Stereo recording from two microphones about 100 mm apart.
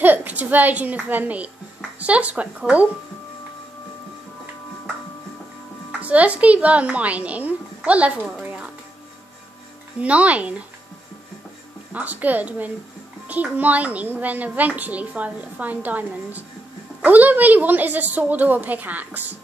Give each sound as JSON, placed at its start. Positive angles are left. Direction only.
{"t": 0.0, "sound": "a child's voice", "side_deg": -20}
{"t": 5.9, "sound": "a woman's voice", "side_deg": -15}
{"t": 9.9, "sound": "a woman's voice", "side_deg": -15}
{"t": 11.9, "sound": "a woman's voice", "side_deg": -15}